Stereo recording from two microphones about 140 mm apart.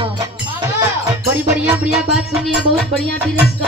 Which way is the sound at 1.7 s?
5° right (ahead or behind).